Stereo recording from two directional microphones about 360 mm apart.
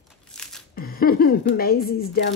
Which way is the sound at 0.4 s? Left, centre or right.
Centre.